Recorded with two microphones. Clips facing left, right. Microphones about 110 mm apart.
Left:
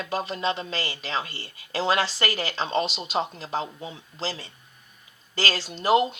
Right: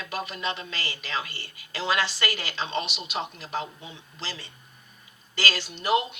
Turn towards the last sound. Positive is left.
turn(degrees=35)  # may be behind; listen again after turning